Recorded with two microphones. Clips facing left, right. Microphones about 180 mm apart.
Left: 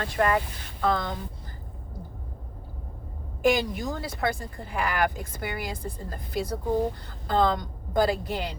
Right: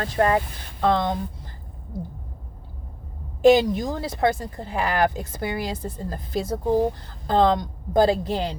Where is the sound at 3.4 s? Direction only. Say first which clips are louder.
Right 8 dB; 25° right (ahead or behind).